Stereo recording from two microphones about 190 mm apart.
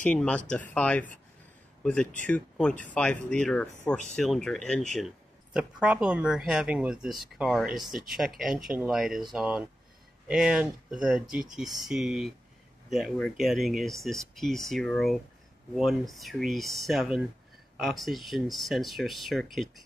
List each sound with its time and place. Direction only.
0.0 s speech: 5° left (ahead or behind)
7.9 s speech: 45° right (ahead or behind)
8.2 s speech: centre (ahead or behind)